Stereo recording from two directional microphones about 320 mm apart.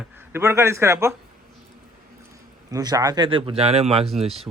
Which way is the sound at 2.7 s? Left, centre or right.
Centre.